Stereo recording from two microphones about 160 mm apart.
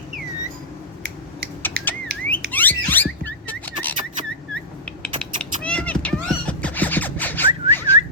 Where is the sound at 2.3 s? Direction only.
10° left (ahead or behind).